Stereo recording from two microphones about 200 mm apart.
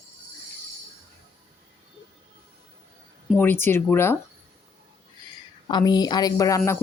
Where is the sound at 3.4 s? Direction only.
10° left (ahead or behind).